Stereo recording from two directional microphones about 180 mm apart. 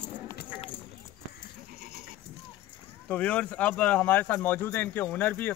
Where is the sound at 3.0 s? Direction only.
5° left (ahead or behind).